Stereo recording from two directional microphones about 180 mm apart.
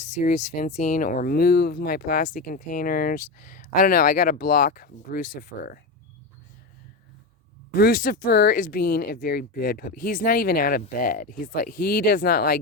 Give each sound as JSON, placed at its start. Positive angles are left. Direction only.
{"t": 0.0, "sound": "speech", "side_deg": 40}
{"t": 7.8, "sound": "speech", "side_deg": 55}